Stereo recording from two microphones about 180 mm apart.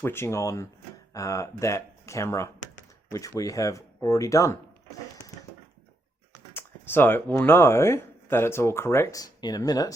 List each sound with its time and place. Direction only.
0.0 s speech: 15° left (ahead or behind)
6.5 s speech: 10° left (ahead or behind)